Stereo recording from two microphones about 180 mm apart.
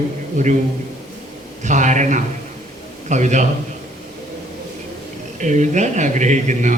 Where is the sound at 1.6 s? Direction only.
45° right (ahead or behind).